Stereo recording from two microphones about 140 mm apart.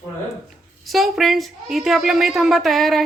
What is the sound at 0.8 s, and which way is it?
A woman's voice, centre (ahead or behind).